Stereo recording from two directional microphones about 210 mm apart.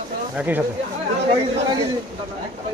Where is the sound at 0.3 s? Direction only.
10° right (ahead or behind).